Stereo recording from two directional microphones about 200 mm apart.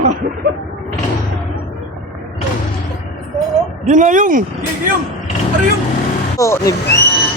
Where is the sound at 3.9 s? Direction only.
40° right (ahead or behind).